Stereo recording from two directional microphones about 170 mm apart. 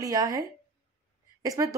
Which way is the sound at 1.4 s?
20° right (ahead or behind).